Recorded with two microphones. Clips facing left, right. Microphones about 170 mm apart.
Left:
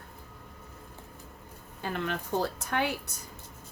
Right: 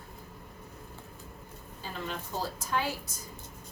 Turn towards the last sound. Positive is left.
turn(degrees=60)  # may be behind; listen again after turning